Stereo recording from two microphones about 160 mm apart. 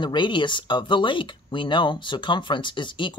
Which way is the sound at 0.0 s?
30° left (ahead or behind).